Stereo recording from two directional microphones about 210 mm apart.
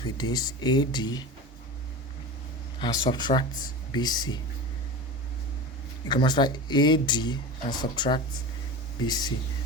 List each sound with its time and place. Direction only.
0.0 s speech: 20° left (ahead or behind)
2.8 s speech: 20° left (ahead or behind)
6.1 s speech: 20° left (ahead or behind)